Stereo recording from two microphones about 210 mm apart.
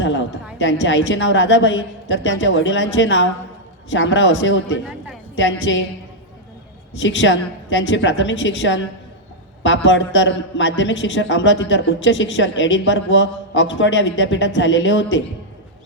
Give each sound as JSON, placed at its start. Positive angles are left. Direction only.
{"t": 0.0, "sound": "a sound", "side_deg": 60}
{"t": 0.6, "sound": "a man's voice", "side_deg": 60}
{"t": 6.9, "sound": "a man's voice", "side_deg": 60}